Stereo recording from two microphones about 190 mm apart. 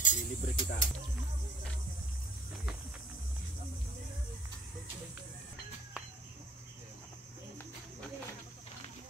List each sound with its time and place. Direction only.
0.0 s speech: 40° left (ahead or behind)